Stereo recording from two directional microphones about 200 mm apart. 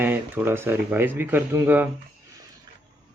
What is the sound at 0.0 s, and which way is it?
Speech, 10° right (ahead or behind).